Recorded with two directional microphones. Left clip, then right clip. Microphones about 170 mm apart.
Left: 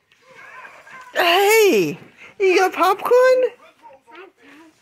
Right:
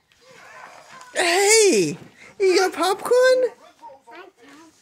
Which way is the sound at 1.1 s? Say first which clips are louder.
Left 3 dB; centre (ahead or behind).